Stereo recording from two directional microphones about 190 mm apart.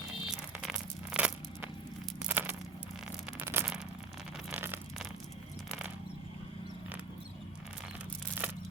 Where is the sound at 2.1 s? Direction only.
5° right (ahead or behind).